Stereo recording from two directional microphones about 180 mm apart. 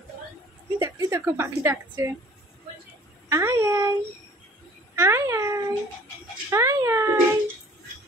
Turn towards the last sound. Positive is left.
turn(degrees=-15)  # may be behind; listen again after turning